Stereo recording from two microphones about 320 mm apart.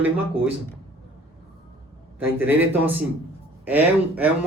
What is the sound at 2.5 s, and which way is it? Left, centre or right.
Speech, centre.